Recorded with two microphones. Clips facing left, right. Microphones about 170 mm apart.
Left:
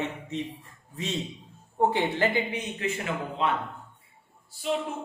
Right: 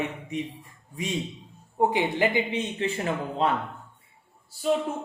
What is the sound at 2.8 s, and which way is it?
Speech, 30° right (ahead or behind).